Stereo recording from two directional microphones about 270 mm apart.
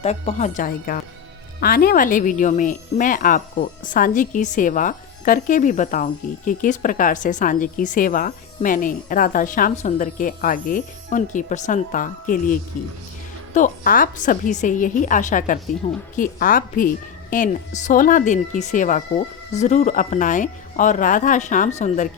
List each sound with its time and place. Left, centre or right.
0.0 s speech: left